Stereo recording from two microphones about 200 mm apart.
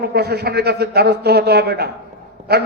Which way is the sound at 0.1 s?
55° right (ahead or behind).